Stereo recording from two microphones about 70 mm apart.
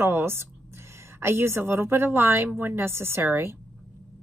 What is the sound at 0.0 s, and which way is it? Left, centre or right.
A woman's voice, right.